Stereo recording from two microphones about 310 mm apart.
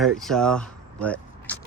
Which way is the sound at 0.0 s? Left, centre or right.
Centre.